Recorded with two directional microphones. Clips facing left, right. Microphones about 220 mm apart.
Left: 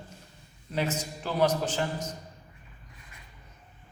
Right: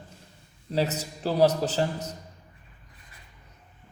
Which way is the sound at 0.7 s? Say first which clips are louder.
Right 3 dB; 35° right (ahead or behind).